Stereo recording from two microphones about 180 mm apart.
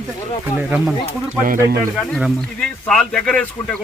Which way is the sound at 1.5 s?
55° right (ahead or behind).